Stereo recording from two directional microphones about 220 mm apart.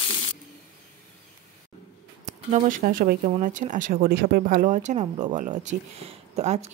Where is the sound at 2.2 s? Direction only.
35° right (ahead or behind).